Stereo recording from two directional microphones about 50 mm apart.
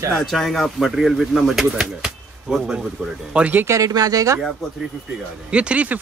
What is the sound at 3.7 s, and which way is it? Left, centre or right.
Speech, right.